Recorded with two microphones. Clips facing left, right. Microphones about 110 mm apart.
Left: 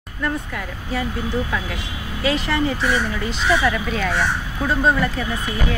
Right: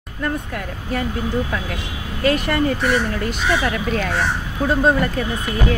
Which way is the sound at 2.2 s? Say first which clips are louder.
Right 3 dB; 55° right (ahead or behind).